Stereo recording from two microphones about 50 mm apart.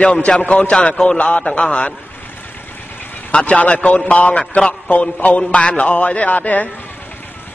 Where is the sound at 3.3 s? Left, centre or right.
Left.